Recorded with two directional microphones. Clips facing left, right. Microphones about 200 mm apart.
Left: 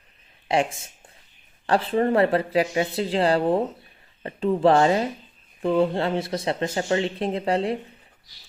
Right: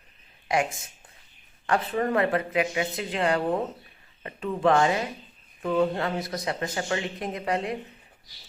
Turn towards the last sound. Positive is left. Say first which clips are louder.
# left 5 dB
turn(degrees=30)  # may be behind; listen again after turning